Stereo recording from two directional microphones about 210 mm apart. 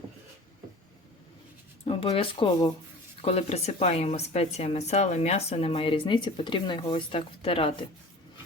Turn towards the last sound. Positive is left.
turn(degrees=25)  # may be behind; listen again after turning